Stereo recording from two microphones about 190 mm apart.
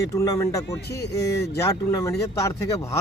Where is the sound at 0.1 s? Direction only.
15° left (ahead or behind).